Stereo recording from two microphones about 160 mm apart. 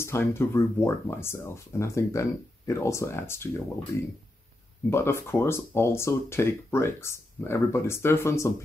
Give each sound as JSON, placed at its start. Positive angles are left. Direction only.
{"t": 0.0, "sound": "speech", "side_deg": 15}
{"t": 4.8, "sound": "speech", "side_deg": 15}